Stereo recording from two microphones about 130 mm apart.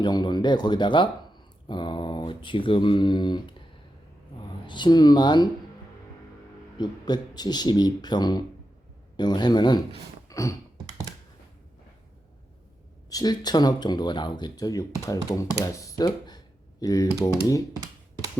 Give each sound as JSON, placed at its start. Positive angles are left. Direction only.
{"t": 0.0, "sound": "speech", "side_deg": 35}
{"t": 4.6, "sound": "speech", "side_deg": 35}
{"t": 6.7, "sound": "speech", "side_deg": 30}
{"t": 10.2, "sound": "a sound", "side_deg": 25}
{"t": 13.1, "sound": "speech", "side_deg": 30}